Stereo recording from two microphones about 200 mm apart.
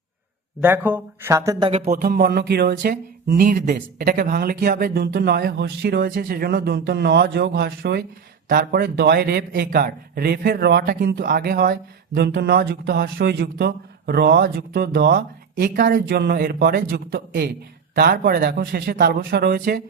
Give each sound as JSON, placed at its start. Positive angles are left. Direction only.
{"t": 0.6, "sound": "speech", "side_deg": -10}
{"t": 1.8, "sound": "a man's voice", "side_deg": -45}